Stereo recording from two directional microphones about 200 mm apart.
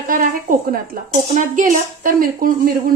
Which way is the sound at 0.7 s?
40° right (ahead or behind).